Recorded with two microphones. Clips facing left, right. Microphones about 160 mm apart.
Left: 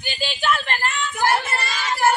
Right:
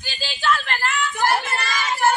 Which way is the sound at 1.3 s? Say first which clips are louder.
Even; centre (ahead or behind).